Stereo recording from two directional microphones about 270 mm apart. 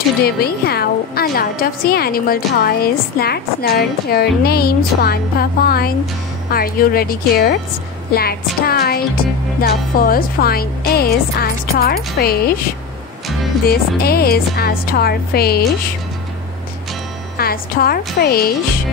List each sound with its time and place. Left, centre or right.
0.2 s a woman's voice: left
13.7 s a woman's voice: left
17.4 s a woman's voice: left